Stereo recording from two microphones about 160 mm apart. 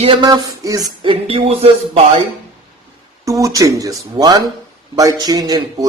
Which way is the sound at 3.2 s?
20° right (ahead or behind).